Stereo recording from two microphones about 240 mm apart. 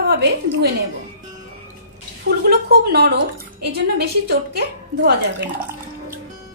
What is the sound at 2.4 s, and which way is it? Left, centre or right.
A woman's voice, right.